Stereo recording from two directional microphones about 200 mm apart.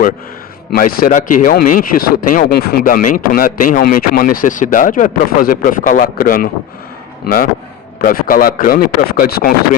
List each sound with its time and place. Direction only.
0.7 s speech: 45° left (ahead or behind)
8.0 s speech: 45° left (ahead or behind)